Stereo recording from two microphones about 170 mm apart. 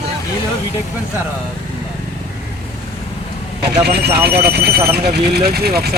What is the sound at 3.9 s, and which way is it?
Speech, 70° right (ahead or behind).